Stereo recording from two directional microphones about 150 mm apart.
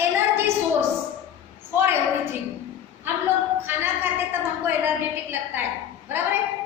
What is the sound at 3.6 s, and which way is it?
A woman's voice, 15° right (ahead or behind).